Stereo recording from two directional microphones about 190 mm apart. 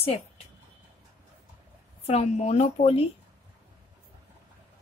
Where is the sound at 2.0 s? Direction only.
35° left (ahead or behind).